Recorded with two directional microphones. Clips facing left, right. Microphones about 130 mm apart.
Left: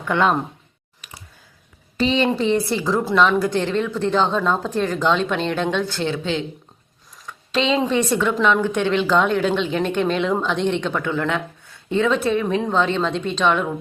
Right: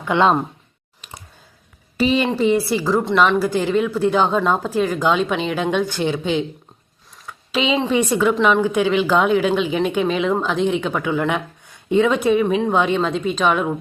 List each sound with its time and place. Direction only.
0.0 s speech: 20° right (ahead or behind)
2.0 s speech: 5° right (ahead or behind)
7.3 s a sound: 5° right (ahead or behind)
7.9 s speech: 10° right (ahead or behind)